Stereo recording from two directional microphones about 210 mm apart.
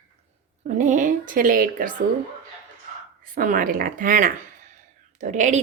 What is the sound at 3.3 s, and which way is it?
A woman's voice, 40° right (ahead or behind).